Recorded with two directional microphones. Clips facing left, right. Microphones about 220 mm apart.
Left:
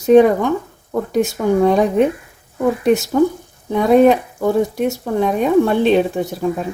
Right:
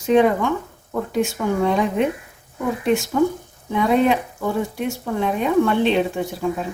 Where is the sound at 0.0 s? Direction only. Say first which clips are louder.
Left 6 dB; 40° left (ahead or behind).